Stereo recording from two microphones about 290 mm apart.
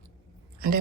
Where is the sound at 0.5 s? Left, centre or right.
Right.